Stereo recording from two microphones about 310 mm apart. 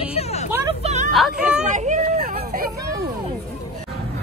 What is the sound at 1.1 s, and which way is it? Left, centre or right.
Music, centre.